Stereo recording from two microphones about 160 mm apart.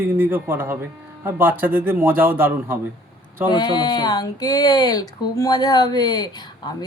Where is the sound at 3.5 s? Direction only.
25° left (ahead or behind).